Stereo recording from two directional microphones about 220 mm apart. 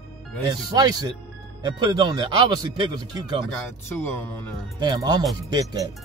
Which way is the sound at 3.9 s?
10° left (ahead or behind).